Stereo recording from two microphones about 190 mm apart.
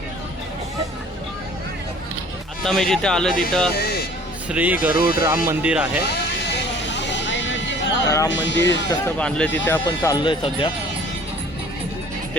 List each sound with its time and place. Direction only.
2.6 s speech: centre (ahead or behind)
3.8 s a sound: 55° left (ahead or behind)
4.4 s speech: 5° right (ahead or behind)
6.9 s vehicle: 65° left (ahead or behind)
8.0 s speech: 20° left (ahead or behind)
8.3 s speech: 70° left (ahead or behind)
9.1 s speech: 5° left (ahead or behind); by 10.7 s 25° left (ahead or behind)